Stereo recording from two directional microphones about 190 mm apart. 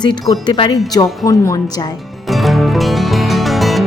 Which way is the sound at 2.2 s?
Centre (ahead or behind).